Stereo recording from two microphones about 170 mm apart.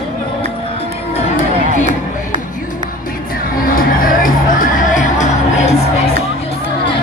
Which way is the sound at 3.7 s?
55° left (ahead or behind).